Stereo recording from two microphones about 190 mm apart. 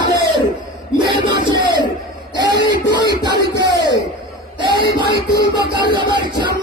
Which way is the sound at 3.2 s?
20° right (ahead or behind).